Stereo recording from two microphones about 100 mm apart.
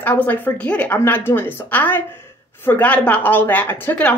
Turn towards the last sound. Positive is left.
turn(degrees=20)  # may be behind; listen again after turning